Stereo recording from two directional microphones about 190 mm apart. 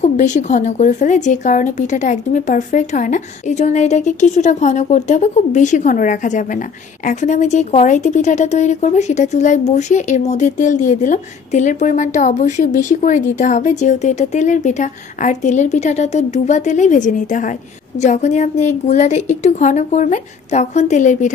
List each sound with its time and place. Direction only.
0.0 s speech: 40° left (ahead or behind)